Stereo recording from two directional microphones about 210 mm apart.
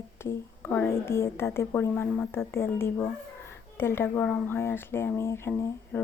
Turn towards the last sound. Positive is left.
turn(degrees=10)  # may be behind; listen again after turning